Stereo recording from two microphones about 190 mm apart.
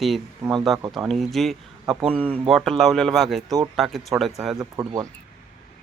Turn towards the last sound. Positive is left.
turn(degrees=-15)  # may be behind; listen again after turning